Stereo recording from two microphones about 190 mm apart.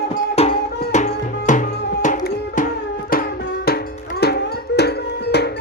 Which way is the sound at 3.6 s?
55° left (ahead or behind).